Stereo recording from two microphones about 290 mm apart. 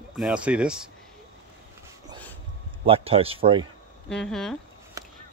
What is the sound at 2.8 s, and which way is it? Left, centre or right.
Speech, centre.